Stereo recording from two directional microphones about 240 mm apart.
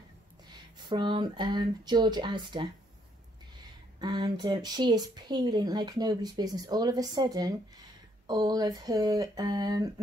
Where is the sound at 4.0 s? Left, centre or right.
Centre.